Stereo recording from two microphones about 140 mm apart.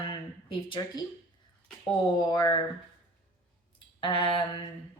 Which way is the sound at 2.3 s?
30° left (ahead or behind).